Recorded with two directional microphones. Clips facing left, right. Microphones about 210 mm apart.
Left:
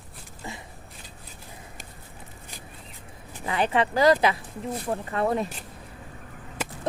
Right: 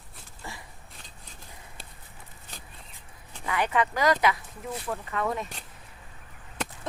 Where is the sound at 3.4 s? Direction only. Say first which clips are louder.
Left 2 dB; 30° left (ahead or behind).